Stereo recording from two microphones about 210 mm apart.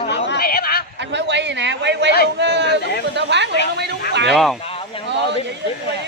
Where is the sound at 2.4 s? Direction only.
55° right (ahead or behind).